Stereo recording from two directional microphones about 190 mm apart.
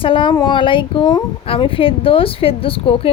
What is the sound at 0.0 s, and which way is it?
A woman's voice, 25° left (ahead or behind).